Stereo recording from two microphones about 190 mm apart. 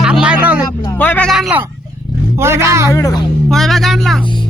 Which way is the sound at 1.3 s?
5° right (ahead or behind).